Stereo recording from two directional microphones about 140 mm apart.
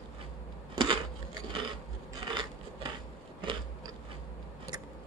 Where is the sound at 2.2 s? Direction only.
35° right (ahead or behind).